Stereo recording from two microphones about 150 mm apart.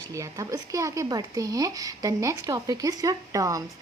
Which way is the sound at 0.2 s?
20° right (ahead or behind).